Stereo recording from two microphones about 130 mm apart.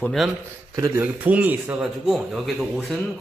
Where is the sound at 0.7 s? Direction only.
20° right (ahead or behind).